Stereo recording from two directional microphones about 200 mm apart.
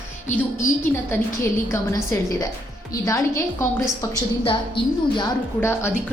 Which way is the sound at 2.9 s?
15° left (ahead or behind).